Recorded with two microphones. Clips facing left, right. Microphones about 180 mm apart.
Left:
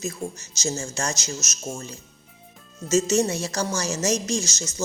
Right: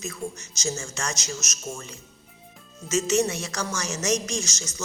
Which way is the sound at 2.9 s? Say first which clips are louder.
Left 2 dB; 30° left (ahead or behind).